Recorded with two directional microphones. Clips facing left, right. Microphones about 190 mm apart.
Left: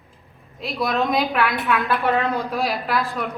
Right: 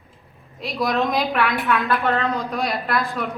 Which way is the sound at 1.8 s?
15° left (ahead or behind).